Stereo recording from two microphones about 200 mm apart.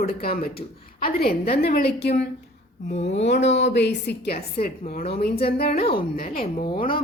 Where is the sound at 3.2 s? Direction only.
60° left (ahead or behind).